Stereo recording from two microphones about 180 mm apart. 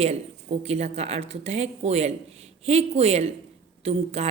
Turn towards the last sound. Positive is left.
turn(degrees=-35)  # may be behind; listen again after turning